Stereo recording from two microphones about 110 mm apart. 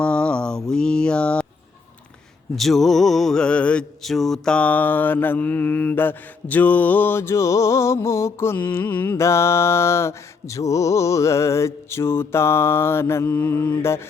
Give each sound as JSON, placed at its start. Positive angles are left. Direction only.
{"t": 0.0, "sound": "mantra", "side_deg": 10}
{"t": 2.6, "sound": "mantra", "side_deg": 0}